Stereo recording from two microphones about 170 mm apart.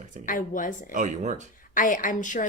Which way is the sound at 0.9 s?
45° right (ahead or behind).